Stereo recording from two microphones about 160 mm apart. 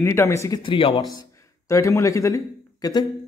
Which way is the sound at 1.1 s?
20° left (ahead or behind).